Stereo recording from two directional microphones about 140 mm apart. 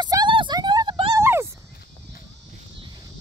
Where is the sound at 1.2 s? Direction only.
20° right (ahead or behind).